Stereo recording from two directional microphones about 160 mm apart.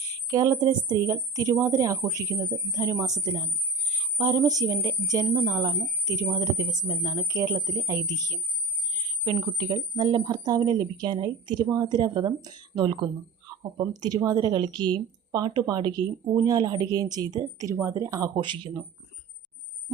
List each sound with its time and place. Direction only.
0.3 s speech: 20° right (ahead or behind)